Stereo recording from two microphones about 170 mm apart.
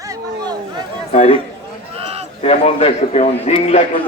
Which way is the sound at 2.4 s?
35° left (ahead or behind).